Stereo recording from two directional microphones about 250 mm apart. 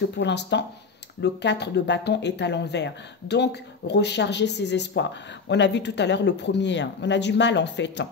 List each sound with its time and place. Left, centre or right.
0.2 s speech: left